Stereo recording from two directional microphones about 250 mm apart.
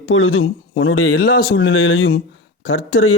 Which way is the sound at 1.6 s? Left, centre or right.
Left.